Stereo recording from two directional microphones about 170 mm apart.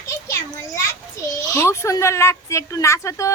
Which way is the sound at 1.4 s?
20° left (ahead or behind).